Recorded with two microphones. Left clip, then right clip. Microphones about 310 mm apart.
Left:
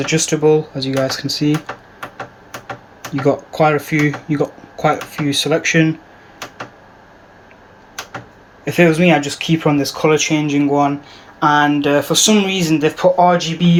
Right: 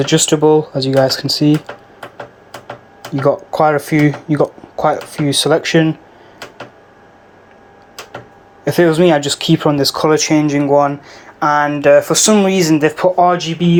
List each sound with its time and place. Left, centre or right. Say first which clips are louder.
0.2 s speech: right 1 dB; centre
3.5 s speech: right 2 dB; centre
8.6 s speech: right 2 dB; centre
10.2 s speech: right 3 dB; right
10.8 s speech: right 3 dB; centre